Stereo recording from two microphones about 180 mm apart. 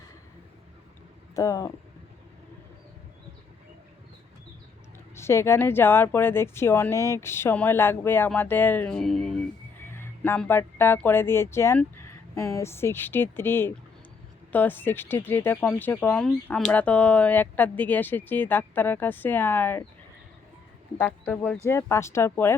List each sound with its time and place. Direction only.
1.4 s speech: 20° left (ahead or behind)
5.1 s speech: 15° left (ahead or behind)
9.8 s speech: 15° left (ahead or behind)
21.0 s speech: 5° left (ahead or behind)